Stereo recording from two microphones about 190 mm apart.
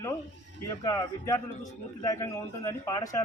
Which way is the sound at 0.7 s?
20° left (ahead or behind).